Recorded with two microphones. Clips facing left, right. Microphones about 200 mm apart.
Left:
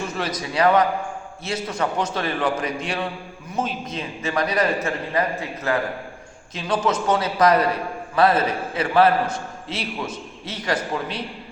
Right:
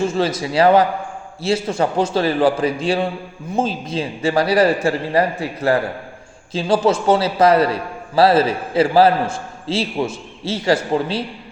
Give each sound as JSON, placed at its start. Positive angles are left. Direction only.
{"t": 0.0, "sound": "a man's voice", "side_deg": -30}